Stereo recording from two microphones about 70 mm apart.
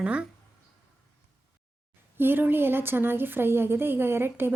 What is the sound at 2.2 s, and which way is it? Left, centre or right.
A woman's voice, right.